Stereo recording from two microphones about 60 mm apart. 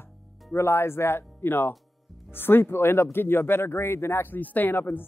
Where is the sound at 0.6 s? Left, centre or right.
Left.